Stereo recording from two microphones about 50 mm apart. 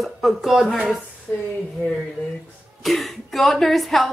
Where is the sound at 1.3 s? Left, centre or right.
Left.